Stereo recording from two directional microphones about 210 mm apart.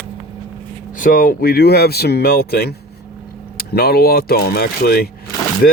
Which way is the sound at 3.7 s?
45° left (ahead or behind).